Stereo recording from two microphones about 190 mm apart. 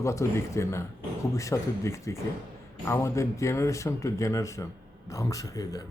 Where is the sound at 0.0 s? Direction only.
15° left (ahead or behind).